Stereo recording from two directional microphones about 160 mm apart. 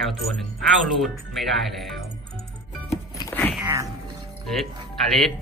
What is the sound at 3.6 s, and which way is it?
Music, 20° right (ahead or behind).